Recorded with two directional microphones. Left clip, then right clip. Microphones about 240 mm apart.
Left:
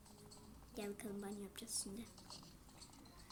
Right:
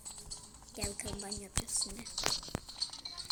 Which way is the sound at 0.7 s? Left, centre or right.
Centre.